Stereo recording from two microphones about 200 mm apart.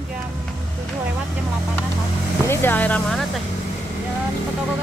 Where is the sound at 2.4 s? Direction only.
10° left (ahead or behind).